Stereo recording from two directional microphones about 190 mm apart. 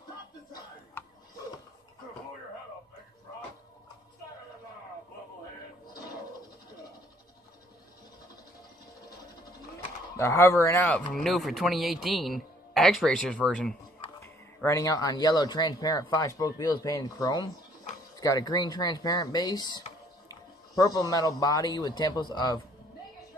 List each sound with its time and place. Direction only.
10.1 s speech: 15° left (ahead or behind)